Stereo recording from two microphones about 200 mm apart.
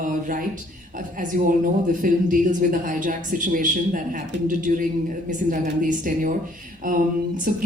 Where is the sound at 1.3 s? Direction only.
45° right (ahead or behind).